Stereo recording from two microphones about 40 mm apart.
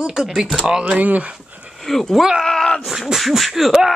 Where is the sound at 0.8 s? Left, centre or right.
Right.